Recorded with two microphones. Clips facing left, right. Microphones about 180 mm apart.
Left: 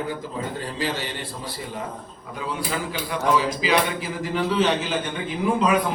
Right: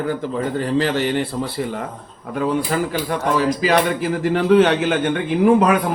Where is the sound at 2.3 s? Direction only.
55° right (ahead or behind).